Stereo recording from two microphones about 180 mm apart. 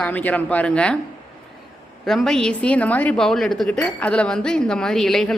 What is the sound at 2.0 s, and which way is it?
Speech, centre (ahead or behind).